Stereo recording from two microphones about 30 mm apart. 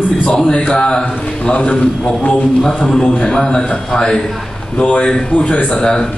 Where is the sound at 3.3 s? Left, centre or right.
Left.